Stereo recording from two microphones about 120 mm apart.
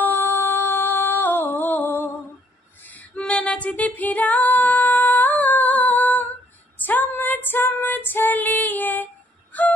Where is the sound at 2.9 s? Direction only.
10° left (ahead or behind).